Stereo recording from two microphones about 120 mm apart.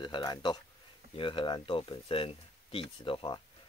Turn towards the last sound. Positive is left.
turn(degrees=45)  # may be behind; listen again after turning